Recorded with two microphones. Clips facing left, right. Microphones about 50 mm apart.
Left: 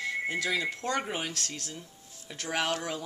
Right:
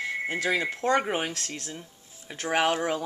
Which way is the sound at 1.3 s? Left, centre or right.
Centre.